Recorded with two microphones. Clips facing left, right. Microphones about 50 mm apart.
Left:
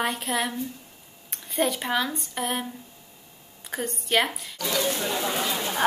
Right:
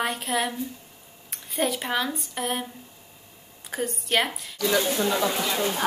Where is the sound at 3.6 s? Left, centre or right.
Centre.